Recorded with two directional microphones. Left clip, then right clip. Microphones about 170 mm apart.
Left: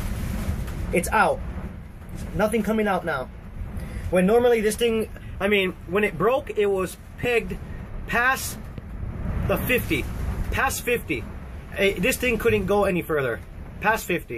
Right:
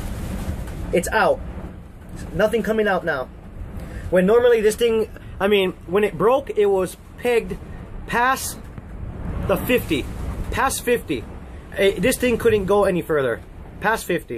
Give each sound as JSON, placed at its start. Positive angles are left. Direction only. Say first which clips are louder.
{"t": 0.9, "sound": "a man's voice", "louder": "right 2 dB", "side_deg": -10}
{"t": 2.3, "sound": "a man's voice", "louder": "right 4 dB", "side_deg": -10}
{"t": 9.5, "sound": "a man's voice", "louder": "right 3 dB", "side_deg": -20}